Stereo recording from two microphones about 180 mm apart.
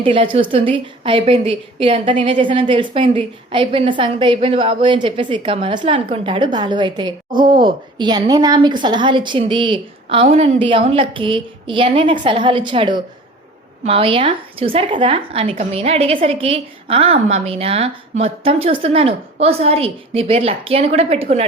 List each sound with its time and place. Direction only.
0.0 s a woman's voice: 30° right (ahead or behind)
7.3 s a woman's voice: 50° right (ahead or behind)
7.6 s a woman's voice: 25° right (ahead or behind)